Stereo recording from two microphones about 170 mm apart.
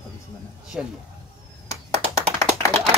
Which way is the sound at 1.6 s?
40° right (ahead or behind).